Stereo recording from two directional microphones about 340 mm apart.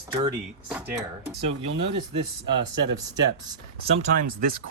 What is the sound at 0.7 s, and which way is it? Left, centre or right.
Speech, centre.